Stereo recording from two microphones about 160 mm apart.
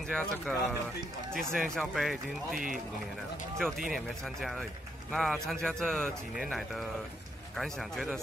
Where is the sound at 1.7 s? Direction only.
Centre (ahead or behind).